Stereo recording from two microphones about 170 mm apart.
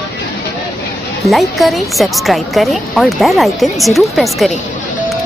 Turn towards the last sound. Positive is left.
turn(degrees=0)  # may be behind; listen again after turning